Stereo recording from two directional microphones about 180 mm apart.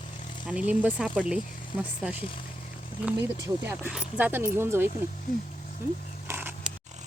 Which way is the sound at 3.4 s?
10° right (ahead or behind).